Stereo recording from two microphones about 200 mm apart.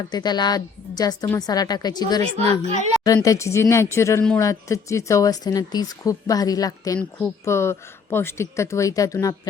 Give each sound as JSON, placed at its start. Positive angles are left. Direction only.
{"t": 0.1, "sound": "a woman's voice", "side_deg": 20}
{"t": 2.5, "sound": "a woman's voice", "side_deg": -35}
{"t": 3.2, "sound": "speech", "side_deg": 15}